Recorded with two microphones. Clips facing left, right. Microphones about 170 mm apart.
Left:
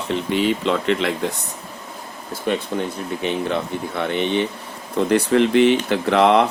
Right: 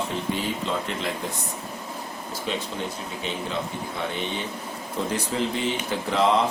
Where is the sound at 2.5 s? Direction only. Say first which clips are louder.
Left 8 dB; 55° left (ahead or behind).